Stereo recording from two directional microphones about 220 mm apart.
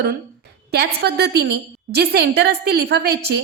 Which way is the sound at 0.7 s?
50° right (ahead or behind).